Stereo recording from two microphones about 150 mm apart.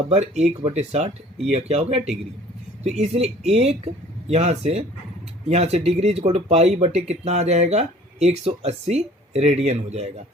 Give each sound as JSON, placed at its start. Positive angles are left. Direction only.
{"t": 0.1, "sound": "speech", "side_deg": -45}